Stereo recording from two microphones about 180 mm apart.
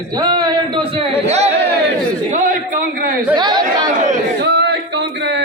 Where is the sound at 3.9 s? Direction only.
40° right (ahead or behind).